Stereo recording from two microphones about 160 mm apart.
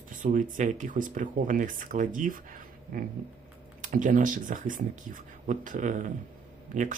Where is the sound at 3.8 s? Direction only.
55° right (ahead or behind).